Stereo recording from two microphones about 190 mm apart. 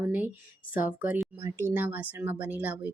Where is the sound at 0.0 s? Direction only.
10° right (ahead or behind).